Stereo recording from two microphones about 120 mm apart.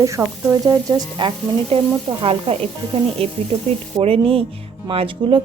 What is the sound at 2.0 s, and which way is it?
A woman's voice, 50° right (ahead or behind).